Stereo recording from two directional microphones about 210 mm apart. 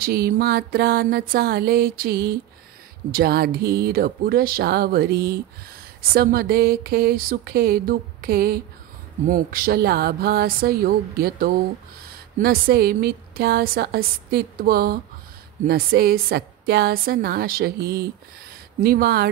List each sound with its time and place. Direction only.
0.0 s a woman's voice: 45° right (ahead or behind)